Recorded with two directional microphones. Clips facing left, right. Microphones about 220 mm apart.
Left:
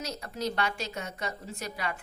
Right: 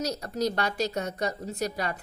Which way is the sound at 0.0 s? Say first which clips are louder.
Right 6 dB; 40° right (ahead or behind).